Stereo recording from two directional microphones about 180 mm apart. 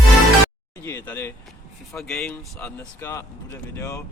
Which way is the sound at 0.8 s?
15° left (ahead or behind).